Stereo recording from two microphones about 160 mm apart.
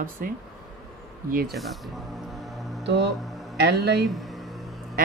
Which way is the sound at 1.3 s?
70° right (ahead or behind).